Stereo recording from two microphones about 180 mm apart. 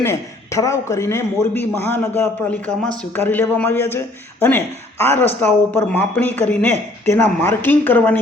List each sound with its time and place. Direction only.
0.0 s a man's voice: 15° left (ahead or behind)